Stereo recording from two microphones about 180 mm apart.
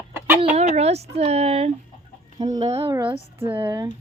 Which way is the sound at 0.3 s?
40° right (ahead or behind).